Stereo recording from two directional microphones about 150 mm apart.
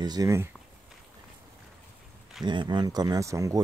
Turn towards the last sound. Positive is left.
turn(degrees=-20)  # may be behind; listen again after turning